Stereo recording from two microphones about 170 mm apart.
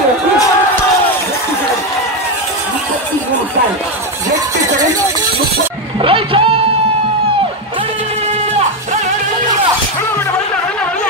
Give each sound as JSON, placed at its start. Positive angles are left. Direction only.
{"t": 5.9, "sound": "music", "side_deg": -30}